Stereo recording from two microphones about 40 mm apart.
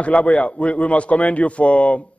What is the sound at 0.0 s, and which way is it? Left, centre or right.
Speech, left.